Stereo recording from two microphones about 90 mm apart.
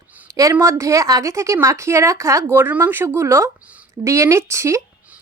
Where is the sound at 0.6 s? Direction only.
35° right (ahead or behind).